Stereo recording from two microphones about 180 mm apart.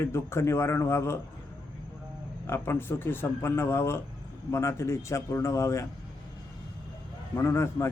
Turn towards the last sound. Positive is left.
turn(degrees=15)  # may be behind; listen again after turning